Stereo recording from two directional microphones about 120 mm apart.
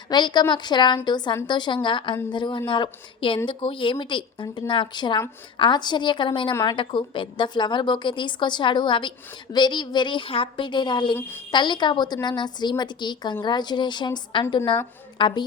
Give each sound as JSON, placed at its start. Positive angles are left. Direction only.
{"t": 0.1, "sound": "a woman's voice", "side_deg": 40}